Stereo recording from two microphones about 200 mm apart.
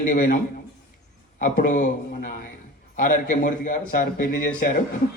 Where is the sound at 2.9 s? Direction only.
40° left (ahead or behind).